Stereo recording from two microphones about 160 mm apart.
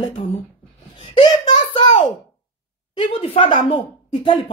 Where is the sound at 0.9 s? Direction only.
30° left (ahead or behind).